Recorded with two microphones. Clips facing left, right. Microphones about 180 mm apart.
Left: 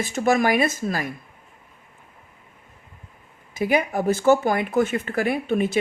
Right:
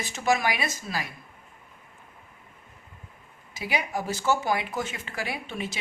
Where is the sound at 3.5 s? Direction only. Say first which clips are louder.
Left 8 dB; 50° left (ahead or behind).